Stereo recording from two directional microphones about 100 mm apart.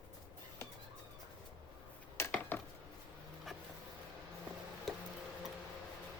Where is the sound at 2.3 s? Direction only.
20° left (ahead or behind).